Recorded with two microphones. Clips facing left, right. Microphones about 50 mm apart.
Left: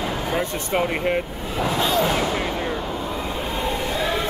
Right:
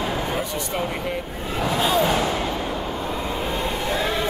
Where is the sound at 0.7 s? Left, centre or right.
Left.